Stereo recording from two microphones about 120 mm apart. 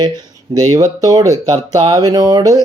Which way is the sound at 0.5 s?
30° right (ahead or behind).